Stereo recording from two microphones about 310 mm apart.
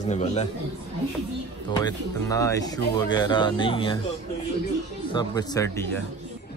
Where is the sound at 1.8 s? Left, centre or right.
Centre.